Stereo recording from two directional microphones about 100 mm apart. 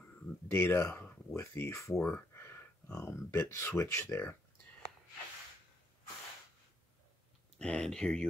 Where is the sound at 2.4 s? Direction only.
25° left (ahead or behind).